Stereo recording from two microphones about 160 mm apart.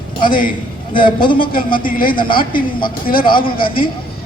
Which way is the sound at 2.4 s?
65° left (ahead or behind).